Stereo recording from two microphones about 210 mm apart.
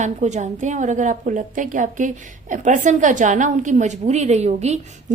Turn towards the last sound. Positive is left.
turn(degrees=-30)  # may be behind; listen again after turning